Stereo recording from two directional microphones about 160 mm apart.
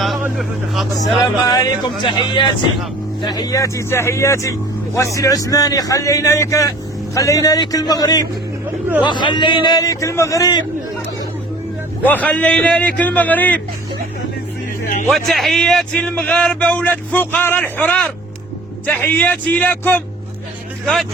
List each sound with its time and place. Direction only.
0.3 s speech: centre (ahead or behind)
1.5 s speech: 25° left (ahead or behind)
12.0 s a man's voice: 10° left (ahead or behind)
15.1 s a man's voice: centre (ahead or behind)
20.8 s speech: centre (ahead or behind)